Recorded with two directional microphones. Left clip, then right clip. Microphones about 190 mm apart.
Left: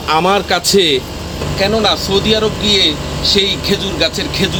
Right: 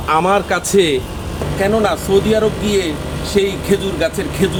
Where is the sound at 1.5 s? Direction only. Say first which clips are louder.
Left 2 dB; 5° right (ahead or behind).